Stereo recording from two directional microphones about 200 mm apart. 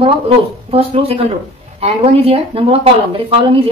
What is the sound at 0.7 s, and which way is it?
Speech, 30° right (ahead or behind).